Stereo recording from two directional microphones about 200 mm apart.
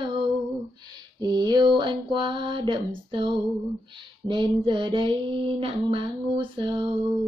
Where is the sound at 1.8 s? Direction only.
25° right (ahead or behind).